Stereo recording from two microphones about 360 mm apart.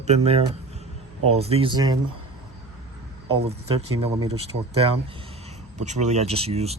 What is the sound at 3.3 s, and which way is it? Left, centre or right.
Speech, centre.